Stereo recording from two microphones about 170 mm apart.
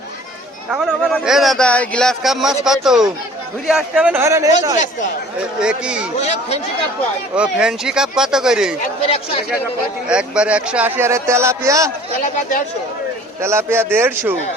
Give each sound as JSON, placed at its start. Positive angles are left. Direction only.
{"t": 1.2, "sound": "a man's voice", "side_deg": 0}
{"t": 5.5, "sound": "speech", "side_deg": -5}
{"t": 6.1, "sound": "speech", "side_deg": 40}
{"t": 7.3, "sound": "speech", "side_deg": -5}
{"t": 9.0, "sound": "speech", "side_deg": 35}
{"t": 10.1, "sound": "a man's voice", "side_deg": -5}
{"t": 12.2, "sound": "speech", "side_deg": 50}
{"t": 13.4, "sound": "a man's voice", "side_deg": -15}